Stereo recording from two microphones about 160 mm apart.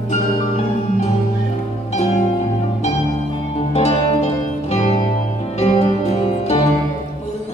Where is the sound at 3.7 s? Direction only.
40° left (ahead or behind).